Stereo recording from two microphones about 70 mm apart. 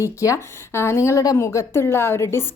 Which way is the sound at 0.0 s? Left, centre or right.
Left.